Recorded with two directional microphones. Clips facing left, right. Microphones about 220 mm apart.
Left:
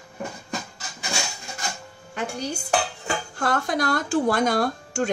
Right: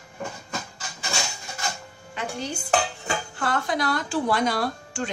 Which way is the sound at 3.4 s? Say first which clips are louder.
Left 2 dB; 45° left (ahead or behind).